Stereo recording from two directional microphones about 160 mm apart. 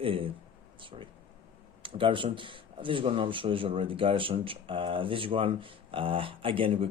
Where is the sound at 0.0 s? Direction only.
35° right (ahead or behind).